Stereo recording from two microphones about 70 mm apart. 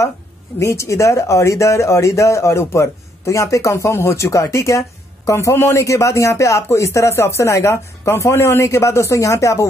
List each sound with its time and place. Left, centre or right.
0.6 s speech: left